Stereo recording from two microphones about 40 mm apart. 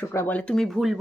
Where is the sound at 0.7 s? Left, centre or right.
Centre.